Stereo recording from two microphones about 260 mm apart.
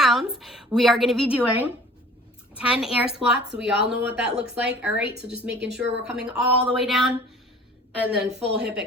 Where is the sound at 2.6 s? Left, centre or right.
Centre.